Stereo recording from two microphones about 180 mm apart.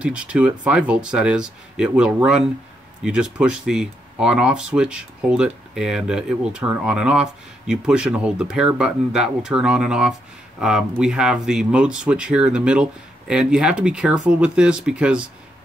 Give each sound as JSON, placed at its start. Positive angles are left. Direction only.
{"t": 0.0, "sound": "speech", "side_deg": -5}